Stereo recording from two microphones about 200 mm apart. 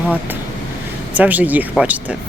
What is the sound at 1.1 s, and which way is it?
Speech, 10° right (ahead or behind).